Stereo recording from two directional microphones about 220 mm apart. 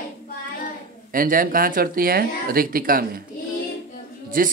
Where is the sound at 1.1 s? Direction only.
40° right (ahead or behind).